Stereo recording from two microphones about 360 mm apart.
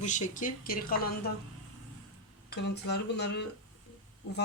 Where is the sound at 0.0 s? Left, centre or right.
Centre.